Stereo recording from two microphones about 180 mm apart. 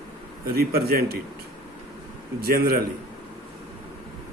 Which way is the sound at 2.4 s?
55° right (ahead or behind).